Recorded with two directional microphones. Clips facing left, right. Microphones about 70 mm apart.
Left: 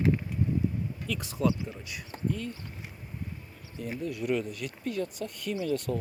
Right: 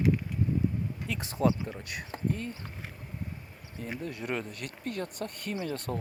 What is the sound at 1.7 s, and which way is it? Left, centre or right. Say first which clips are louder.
Speech: right 2 dB; right.